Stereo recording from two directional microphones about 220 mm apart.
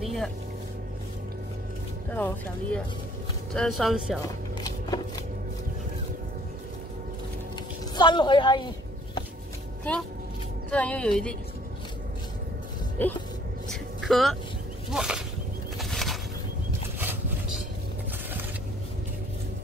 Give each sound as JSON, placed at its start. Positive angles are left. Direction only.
{"t": 0.0, "sound": "music", "side_deg": 0}
{"t": 2.0, "sound": "speech", "side_deg": 10}
{"t": 4.2, "sound": "chopping", "side_deg": 15}
{"t": 7.9, "sound": "a woman's voice", "side_deg": 20}
{"t": 10.7, "sound": "speech", "side_deg": 5}
{"t": 13.0, "sound": "speech", "side_deg": 10}
{"t": 13.7, "sound": "vehicle", "side_deg": 0}
{"t": 14.9, "sound": "whip", "side_deg": -5}
{"t": 15.8, "sound": "a sound", "side_deg": 0}
{"t": 17.0, "sound": "vehicle", "side_deg": -10}